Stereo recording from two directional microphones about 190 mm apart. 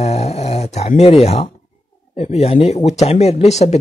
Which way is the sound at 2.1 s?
35° left (ahead or behind).